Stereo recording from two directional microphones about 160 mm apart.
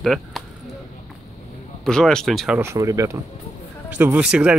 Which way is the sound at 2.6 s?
15° right (ahead or behind).